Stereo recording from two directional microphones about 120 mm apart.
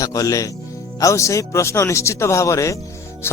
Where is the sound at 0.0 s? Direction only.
30° left (ahead or behind).